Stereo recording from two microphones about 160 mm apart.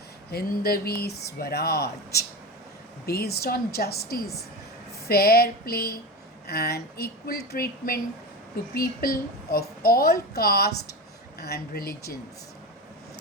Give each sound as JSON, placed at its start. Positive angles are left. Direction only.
{"t": 0.3, "sound": "a woman's voice", "side_deg": 70}